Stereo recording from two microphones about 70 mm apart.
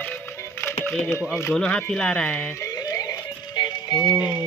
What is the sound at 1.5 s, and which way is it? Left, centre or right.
Speech, centre.